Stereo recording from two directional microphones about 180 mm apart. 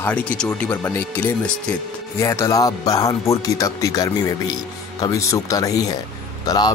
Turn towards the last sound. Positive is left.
turn(degrees=20)  # may be behind; listen again after turning